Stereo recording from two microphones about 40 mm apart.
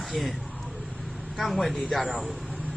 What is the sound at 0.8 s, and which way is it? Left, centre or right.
Vehicle, right.